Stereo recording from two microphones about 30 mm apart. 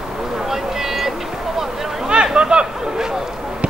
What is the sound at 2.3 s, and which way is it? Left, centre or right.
Chatter, right.